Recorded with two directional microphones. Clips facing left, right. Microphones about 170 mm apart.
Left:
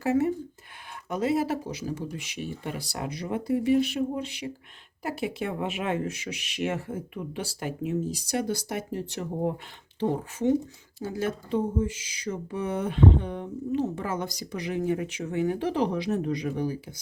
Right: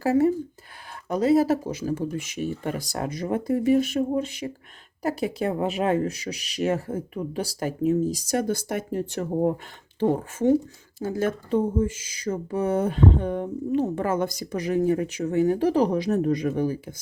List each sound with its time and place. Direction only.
0.0 s speech: 35° right (ahead or behind)